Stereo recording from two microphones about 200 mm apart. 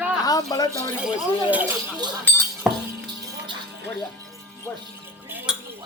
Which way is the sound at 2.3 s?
10° left (ahead or behind).